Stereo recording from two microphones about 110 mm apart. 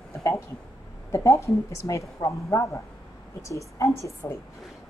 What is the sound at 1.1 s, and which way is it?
A woman's voice, 25° left (ahead or behind).